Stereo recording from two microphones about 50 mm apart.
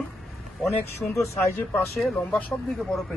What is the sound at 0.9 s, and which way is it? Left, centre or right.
Speech, left.